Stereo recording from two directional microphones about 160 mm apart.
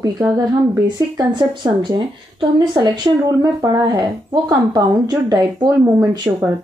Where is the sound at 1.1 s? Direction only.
30° right (ahead or behind).